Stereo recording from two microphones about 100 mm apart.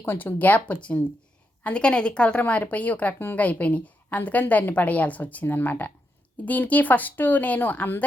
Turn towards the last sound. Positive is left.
turn(degrees=20)  # may be behind; listen again after turning